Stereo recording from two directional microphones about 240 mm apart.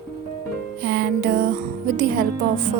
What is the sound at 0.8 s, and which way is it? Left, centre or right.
Music, right.